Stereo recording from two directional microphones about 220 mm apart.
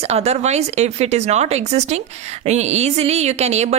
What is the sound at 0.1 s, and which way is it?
Speech, 30° right (ahead or behind).